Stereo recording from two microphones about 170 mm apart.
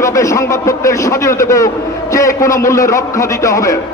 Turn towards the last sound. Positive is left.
turn(degrees=20)  # may be behind; listen again after turning